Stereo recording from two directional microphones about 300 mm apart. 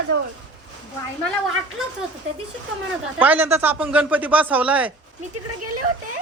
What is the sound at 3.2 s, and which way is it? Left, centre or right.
A man's voice, centre.